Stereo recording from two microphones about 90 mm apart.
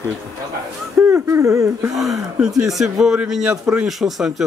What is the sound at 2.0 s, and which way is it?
Speech, centre (ahead or behind).